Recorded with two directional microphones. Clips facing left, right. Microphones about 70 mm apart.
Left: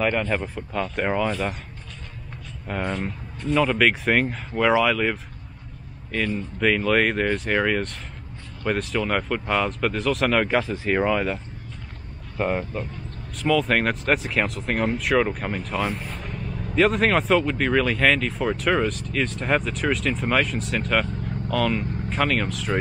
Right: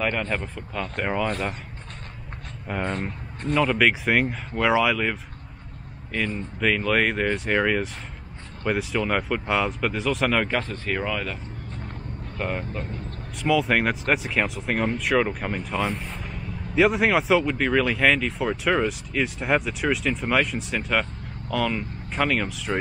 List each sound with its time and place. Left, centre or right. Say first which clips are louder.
0.1 s speech: left 3 dB; centre
2.7 s speech: left 1 dB; centre
6.2 s speech: left 2 dB; centre
12.4 s speech: left 4 dB; centre
13.4 s speech: left 1 dB; centre